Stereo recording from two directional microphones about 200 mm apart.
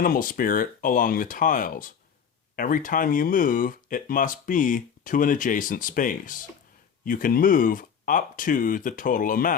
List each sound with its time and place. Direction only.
0.0 s speech: 45° left (ahead or behind)